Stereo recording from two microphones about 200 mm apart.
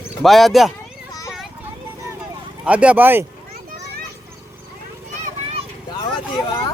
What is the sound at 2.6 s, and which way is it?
Speech, 5° right (ahead or behind).